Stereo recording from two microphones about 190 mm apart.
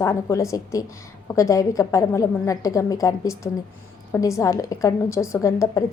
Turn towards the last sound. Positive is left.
turn(degrees=15)  # may be behind; listen again after turning